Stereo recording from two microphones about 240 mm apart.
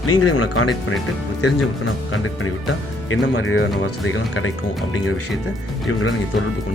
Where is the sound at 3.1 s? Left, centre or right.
Left.